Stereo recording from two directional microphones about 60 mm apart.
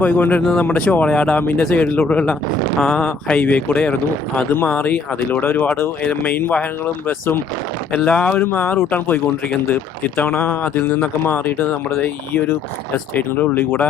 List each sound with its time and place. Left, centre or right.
0.0 s speech: left
0.7 s speech: centre
1.4 s speech: left
2.7 s speech: centre
3.4 s speech: left
6.0 s speech: left
7.9 s speech: left
8.4 s speech: left
11.5 s speech: left
12.0 s speech: left